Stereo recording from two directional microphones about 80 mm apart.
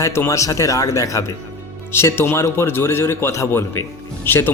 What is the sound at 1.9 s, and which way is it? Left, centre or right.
A man's voice, left.